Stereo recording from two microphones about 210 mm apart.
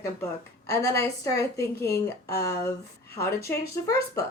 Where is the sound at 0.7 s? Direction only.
15° left (ahead or behind).